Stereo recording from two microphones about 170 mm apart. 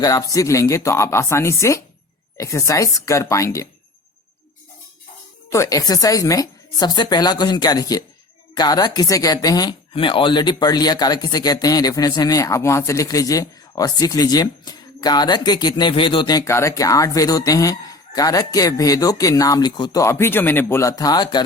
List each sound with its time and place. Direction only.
0.0 s speech: 20° left (ahead or behind)
5.5 s speech: 20° left (ahead or behind)